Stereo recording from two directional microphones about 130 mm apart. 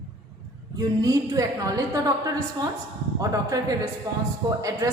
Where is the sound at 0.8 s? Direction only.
30° right (ahead or behind).